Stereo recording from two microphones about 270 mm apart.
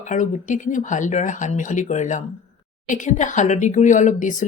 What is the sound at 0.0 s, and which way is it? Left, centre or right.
Speech, left.